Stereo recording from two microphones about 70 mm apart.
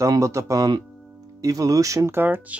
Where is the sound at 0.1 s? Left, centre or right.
Right.